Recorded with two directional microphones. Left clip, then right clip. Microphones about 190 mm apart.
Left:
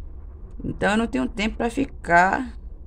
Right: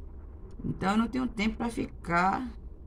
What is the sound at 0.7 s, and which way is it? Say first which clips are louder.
Speech: left 8 dB; 45° left (ahead or behind).